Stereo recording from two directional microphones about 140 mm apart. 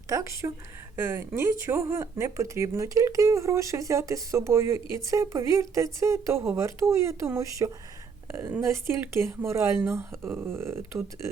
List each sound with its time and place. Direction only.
0.1 s speech: 20° right (ahead or behind)